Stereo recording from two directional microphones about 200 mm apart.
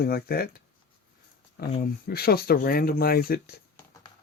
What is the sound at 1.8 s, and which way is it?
Speech, 50° left (ahead or behind).